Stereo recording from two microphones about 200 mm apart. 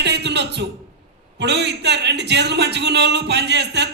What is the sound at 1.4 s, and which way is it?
A man's voice, 60° right (ahead or behind).